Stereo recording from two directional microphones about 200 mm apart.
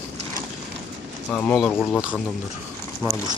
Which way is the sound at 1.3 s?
5° left (ahead or behind).